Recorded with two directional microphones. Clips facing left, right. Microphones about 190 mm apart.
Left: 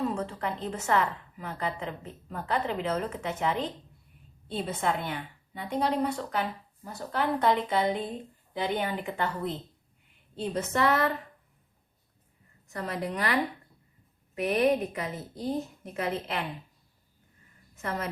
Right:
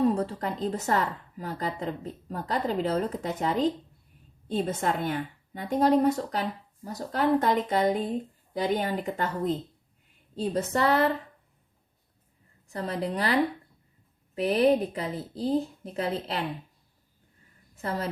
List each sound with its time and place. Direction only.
0.0 s a woman's voice: 35° right (ahead or behind)
12.6 s a woman's voice: 30° right (ahead or behind)
14.3 s a woman's voice: 30° right (ahead or behind)
17.7 s a woman's voice: 35° right (ahead or behind)